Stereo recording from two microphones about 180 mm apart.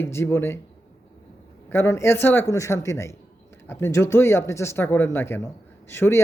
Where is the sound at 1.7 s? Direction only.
15° left (ahead or behind).